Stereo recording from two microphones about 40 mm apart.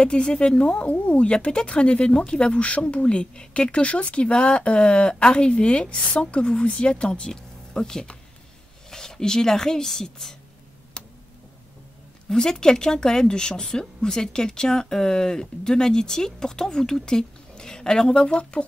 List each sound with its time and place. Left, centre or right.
0.0 s speech: left
0.7 s speech: left; by 10.3 s centre
12.4 s speech: centre